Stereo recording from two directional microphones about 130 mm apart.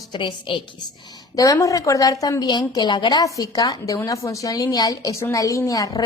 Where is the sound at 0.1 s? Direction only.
35° left (ahead or behind).